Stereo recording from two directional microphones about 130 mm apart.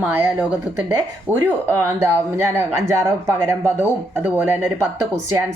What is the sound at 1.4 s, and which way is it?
Speech, 20° right (ahead or behind).